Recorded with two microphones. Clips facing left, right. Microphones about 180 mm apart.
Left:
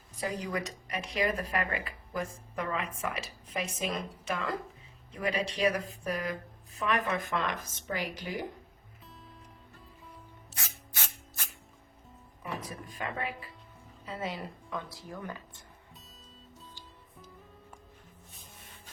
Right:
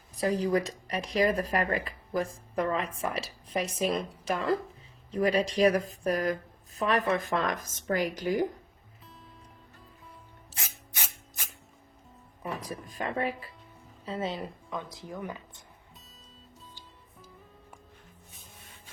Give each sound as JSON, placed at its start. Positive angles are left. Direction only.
{"t": 0.2, "sound": "speech", "side_deg": -35}
{"t": 10.9, "sound": "a sound", "side_deg": -10}
{"t": 12.4, "sound": "speech", "side_deg": -35}